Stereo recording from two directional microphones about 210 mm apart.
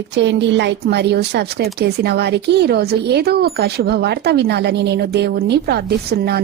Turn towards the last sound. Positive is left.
turn(degrees=-50)  # may be behind; listen again after turning